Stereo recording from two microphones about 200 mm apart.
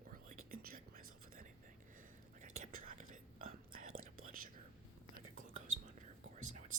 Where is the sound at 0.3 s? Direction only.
45° right (ahead or behind).